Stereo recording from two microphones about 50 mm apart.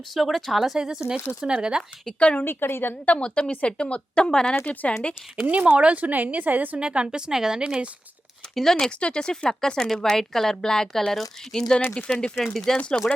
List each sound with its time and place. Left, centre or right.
0.1 s a woman's voice: centre
2.0 s speech: left
2.4 s a woman's voice: left
3.1 s speech: centre
4.6 s speech: left
5.5 s speech: right
6.7 s a woman's voice: centre
8.5 s speech: centre
9.0 s speech: centre
12.0 s speech: centre
12.4 s speech: centre
12.7 s speech: centre